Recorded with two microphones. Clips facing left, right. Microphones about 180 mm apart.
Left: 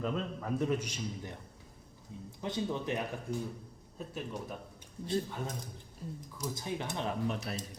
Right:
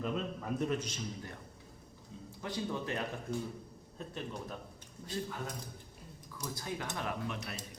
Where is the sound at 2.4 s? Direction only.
20° left (ahead or behind).